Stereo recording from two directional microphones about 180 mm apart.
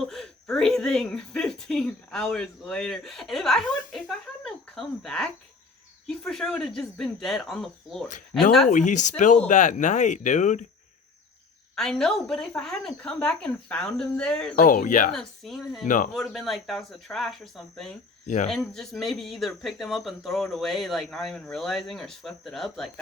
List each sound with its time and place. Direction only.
0.0 s speech: centre (ahead or behind)
8.7 s speech: 40° left (ahead or behind)
11.7 s speech: 5° left (ahead or behind)
14.5 s speech: 50° left (ahead or behind)
15.1 s speech: centre (ahead or behind)
18.3 s speech: 45° left (ahead or behind)
18.5 s speech: centre (ahead or behind)